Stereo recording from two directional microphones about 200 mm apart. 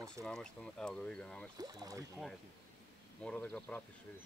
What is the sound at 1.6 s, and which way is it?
Speech, 20° right (ahead or behind).